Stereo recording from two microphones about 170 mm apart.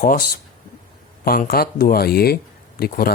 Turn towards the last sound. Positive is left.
turn(degrees=60)  # may be behind; listen again after turning